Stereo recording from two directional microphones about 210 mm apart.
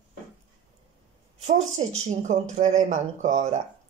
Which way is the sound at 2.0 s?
35° right (ahead or behind).